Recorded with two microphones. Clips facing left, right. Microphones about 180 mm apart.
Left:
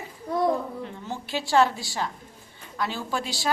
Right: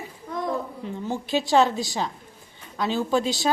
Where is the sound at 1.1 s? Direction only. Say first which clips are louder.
Right 6 dB; 20° right (ahead or behind).